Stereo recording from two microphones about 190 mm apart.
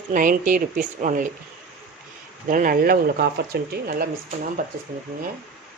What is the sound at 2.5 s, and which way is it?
Speech, 45° right (ahead or behind).